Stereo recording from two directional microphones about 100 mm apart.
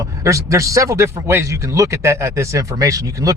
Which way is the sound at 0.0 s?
30° right (ahead or behind).